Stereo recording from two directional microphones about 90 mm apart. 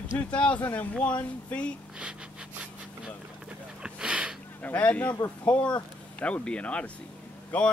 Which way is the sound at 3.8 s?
10° right (ahead or behind).